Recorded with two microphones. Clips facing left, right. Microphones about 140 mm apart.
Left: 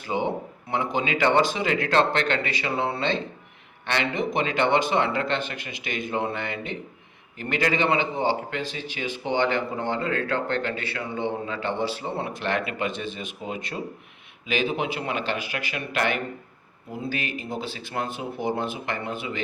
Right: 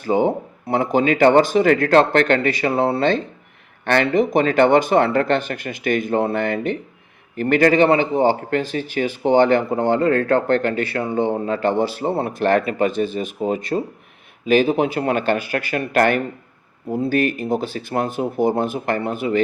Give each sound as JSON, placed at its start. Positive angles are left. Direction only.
{"t": 0.0, "sound": "speech", "side_deg": -40}